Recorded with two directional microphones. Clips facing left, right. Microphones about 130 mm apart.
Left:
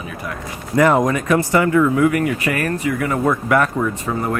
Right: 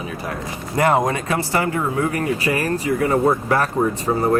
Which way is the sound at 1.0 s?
30° right (ahead or behind).